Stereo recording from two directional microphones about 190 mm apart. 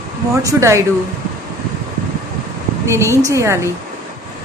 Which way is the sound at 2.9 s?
15° right (ahead or behind).